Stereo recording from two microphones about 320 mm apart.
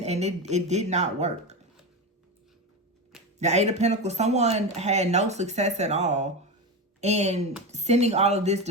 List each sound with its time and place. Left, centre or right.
0.0 s speech: right
3.3 s speech: right